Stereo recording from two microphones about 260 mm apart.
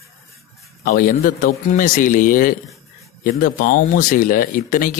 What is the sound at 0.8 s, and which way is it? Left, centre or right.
Speech, left.